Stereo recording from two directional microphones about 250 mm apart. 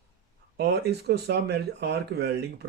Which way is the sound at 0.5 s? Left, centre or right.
Right.